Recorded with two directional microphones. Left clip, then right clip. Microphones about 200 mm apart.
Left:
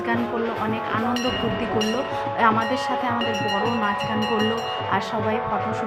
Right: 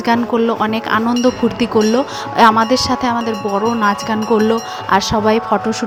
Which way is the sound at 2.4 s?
40° right (ahead or behind).